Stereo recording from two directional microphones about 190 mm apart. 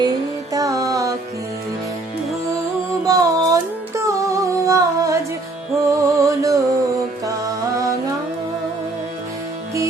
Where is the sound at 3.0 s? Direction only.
20° right (ahead or behind).